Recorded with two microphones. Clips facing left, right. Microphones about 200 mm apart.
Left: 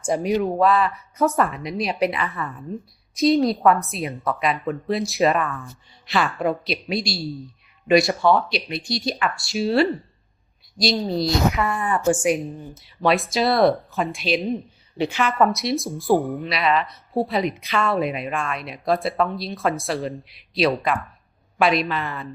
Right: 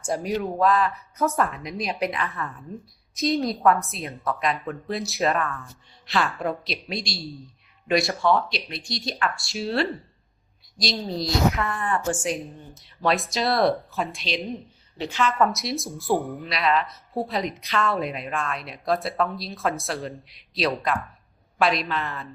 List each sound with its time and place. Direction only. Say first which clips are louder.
0.2 s a woman's voice: left 4 dB; 5° left (ahead or behind)
12.0 s a woman's voice: left 7 dB; 15° left (ahead or behind)
12.7 s a woman's voice: left 3 dB; centre (ahead or behind)
15.1 s a woman's voice: left 1 dB; 15° left (ahead or behind)
15.5 s a woman's voice: left 6 dB; centre (ahead or behind)